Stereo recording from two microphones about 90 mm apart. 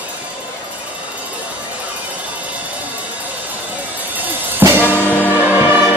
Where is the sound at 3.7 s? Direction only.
20° right (ahead or behind).